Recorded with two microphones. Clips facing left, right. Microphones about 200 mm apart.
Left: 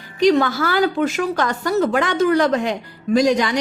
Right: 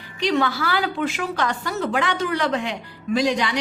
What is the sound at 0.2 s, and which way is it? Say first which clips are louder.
A woman's voice: left 6 dB; 45° left (ahead or behind).